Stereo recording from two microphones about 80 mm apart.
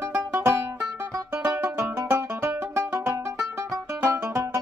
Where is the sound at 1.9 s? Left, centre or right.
Right.